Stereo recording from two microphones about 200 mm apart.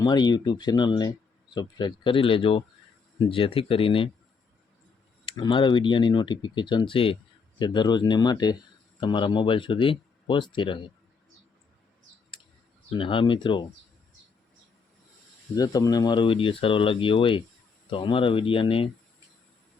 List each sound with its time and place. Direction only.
0.0 s speech: 20° left (ahead or behind)
5.2 s speech: 25° left (ahead or behind)
12.9 s speech: 25° left (ahead or behind)
15.5 s speech: 20° left (ahead or behind)